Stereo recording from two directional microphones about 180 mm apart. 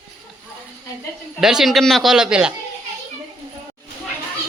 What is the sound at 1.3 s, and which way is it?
Speech, 5° right (ahead or behind).